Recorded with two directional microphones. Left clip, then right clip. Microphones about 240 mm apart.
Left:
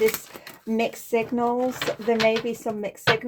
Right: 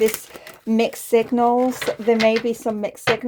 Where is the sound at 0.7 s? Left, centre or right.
Right.